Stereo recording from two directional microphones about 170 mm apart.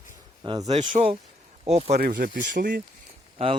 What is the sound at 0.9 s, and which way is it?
Speech, 45° right (ahead or behind).